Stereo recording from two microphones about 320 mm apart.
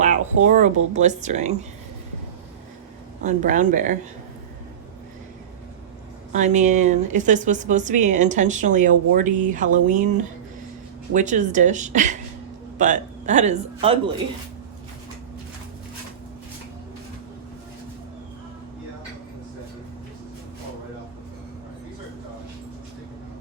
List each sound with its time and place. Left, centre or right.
0.4 s speech: right
3.2 s speech: right
6.3 s speech: right